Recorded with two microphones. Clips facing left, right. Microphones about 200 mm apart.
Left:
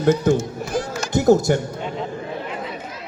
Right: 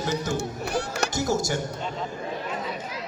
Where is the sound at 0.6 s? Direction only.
65° right (ahead or behind).